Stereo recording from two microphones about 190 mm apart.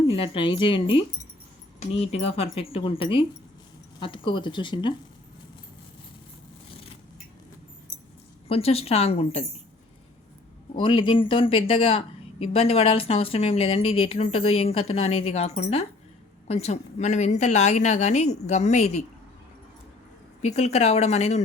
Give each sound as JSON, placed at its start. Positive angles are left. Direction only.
{"t": 0.1, "sound": "speech", "side_deg": 30}
{"t": 8.4, "sound": "a woman's voice", "side_deg": 30}
{"t": 10.8, "sound": "a woman's voice", "side_deg": 25}
{"t": 20.4, "sound": "a woman's voice", "side_deg": 35}